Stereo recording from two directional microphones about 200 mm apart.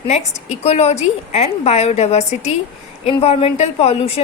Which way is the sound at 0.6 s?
30° left (ahead or behind).